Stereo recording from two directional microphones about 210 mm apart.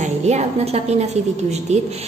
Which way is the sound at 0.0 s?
35° right (ahead or behind).